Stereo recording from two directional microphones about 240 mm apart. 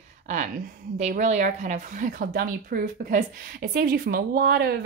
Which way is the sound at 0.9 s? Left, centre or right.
Right.